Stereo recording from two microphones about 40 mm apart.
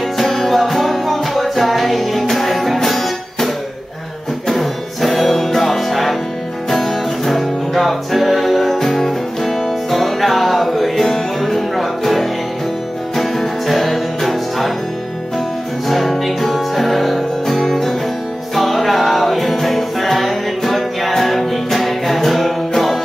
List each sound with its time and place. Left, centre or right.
0.2 s music: centre
4.5 s music: centre
15.9 s music: centre